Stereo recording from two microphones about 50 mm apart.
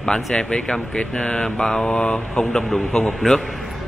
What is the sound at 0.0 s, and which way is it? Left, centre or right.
Speech, centre.